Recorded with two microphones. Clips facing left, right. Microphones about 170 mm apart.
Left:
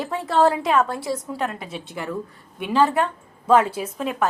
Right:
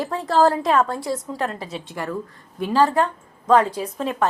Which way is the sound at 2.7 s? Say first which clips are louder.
Right 1 dB; centre (ahead or behind).